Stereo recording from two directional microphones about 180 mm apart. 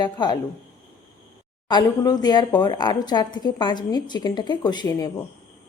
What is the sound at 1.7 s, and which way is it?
Speech, 20° left (ahead or behind).